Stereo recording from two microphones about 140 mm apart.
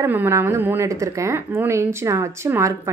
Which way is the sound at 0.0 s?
15° right (ahead or behind).